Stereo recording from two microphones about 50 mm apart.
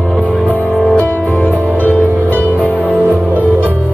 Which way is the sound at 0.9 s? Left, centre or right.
Left.